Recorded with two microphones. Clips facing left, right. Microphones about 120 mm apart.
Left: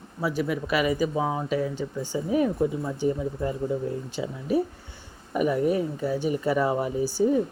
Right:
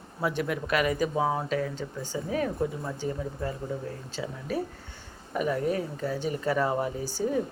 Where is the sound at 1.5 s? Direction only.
10° left (ahead or behind).